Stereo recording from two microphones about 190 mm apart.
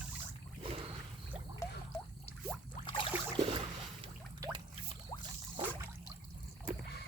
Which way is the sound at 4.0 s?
25° right (ahead or behind).